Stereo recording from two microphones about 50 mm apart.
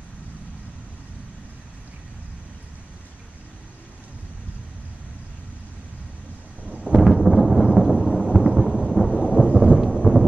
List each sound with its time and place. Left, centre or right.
7.0 s thunder: centre
9.5 s thunder: centre
9.8 s thunder: centre